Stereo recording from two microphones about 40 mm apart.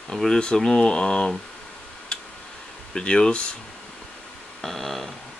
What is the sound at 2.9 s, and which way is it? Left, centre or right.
Speech, left.